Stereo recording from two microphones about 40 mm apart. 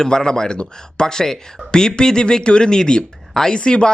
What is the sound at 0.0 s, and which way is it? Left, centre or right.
A man's voice, centre.